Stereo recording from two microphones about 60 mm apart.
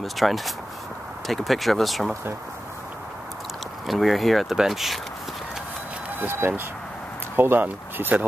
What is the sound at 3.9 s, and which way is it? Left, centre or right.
Speech, centre.